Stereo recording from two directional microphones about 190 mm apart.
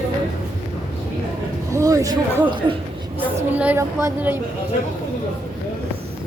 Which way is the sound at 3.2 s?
10° right (ahead or behind).